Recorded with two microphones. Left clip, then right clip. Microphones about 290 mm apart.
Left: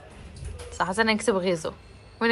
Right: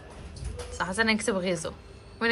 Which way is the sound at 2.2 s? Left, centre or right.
Centre.